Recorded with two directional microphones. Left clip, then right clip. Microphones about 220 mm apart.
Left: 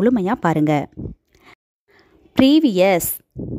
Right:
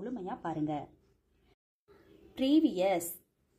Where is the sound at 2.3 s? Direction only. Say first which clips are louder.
Left 14 dB; 50° left (ahead or behind).